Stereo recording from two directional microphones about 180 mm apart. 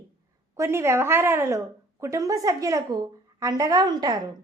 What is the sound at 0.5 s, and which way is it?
A woman's voice, 15° right (ahead or behind).